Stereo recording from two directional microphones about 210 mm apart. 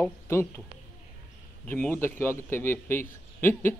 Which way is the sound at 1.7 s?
10° left (ahead or behind).